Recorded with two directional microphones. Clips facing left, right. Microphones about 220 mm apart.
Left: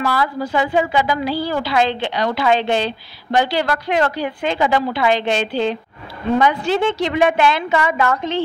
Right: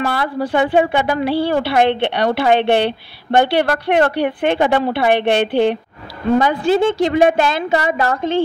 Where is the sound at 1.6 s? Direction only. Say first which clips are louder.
Right 4 dB; 60° right (ahead or behind).